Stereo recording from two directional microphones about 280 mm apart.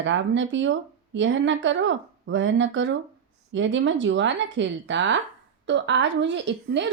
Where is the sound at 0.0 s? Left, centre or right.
Right.